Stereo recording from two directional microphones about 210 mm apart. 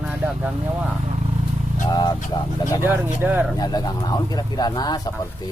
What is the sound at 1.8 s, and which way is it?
Speech, 20° left (ahead or behind).